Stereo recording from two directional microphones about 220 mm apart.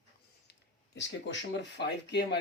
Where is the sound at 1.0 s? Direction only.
55° left (ahead or behind).